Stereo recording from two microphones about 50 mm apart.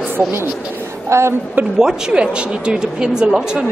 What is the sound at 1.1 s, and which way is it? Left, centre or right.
Speech, right.